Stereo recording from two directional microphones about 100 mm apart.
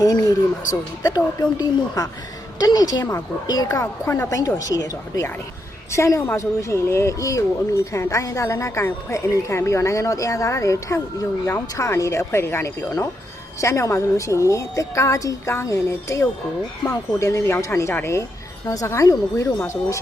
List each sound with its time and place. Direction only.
0.0 s speech: 35° left (ahead or behind)